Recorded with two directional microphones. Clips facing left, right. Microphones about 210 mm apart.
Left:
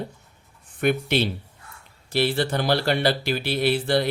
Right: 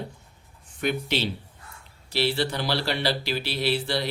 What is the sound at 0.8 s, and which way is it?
Speech, 55° left (ahead or behind).